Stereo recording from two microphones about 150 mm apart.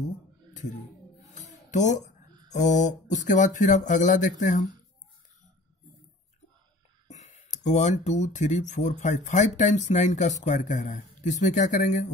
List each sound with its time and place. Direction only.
1.2 s a sound: 55° left (ahead or behind)
2.5 s speech: 55° left (ahead or behind)
7.1 s speech: 55° left (ahead or behind)